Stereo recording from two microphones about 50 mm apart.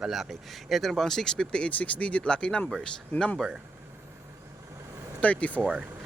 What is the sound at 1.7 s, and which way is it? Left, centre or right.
Speech, left.